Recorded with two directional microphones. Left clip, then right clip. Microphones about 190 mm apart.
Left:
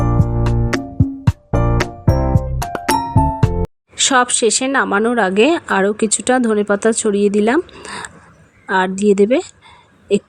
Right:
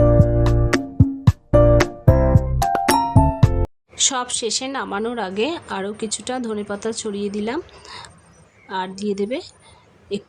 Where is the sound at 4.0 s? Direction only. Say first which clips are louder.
Left 8 dB; 35° left (ahead or behind).